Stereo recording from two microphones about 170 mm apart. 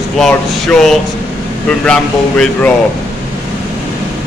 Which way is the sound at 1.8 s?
5° left (ahead or behind).